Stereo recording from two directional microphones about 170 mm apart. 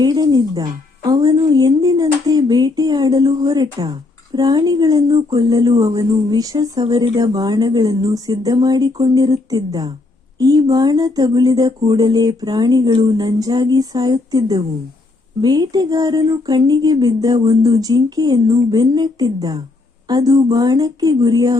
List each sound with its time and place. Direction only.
0.0 s speech: 25° right (ahead or behind)